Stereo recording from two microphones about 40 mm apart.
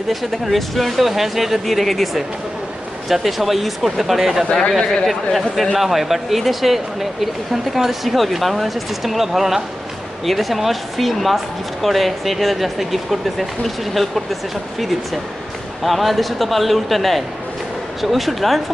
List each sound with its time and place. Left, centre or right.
0.1 s speech: centre
4.5 s speech: centre
5.0 s speech: centre
15.8 s speech: centre